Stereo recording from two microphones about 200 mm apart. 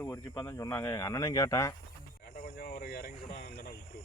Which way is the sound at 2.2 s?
45° left (ahead or behind).